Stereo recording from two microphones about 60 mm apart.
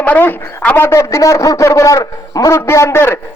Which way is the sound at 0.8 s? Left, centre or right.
Left.